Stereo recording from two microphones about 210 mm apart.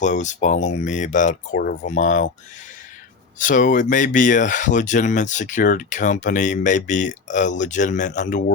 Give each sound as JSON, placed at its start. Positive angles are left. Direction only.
{"t": 0.0, "sound": "speech", "side_deg": 35}
{"t": 3.3, "sound": "speech", "side_deg": 35}